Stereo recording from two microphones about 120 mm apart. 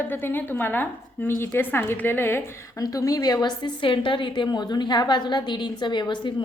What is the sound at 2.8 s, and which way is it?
A woman's voice, 30° left (ahead or behind).